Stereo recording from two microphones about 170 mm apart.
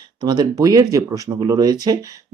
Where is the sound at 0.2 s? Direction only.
25° right (ahead or behind).